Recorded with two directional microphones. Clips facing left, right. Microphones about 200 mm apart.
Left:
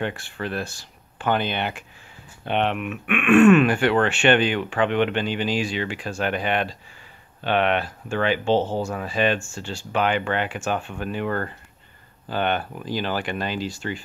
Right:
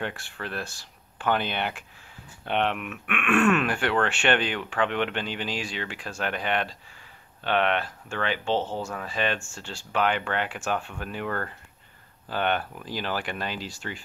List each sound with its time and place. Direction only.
0.0 s speech: centre (ahead or behind)
8.5 s speech: 35° left (ahead or behind)
8.9 s speech: 10° left (ahead or behind)